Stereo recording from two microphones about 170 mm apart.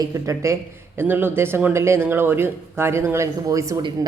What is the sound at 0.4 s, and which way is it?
Speech, 15° right (ahead or behind).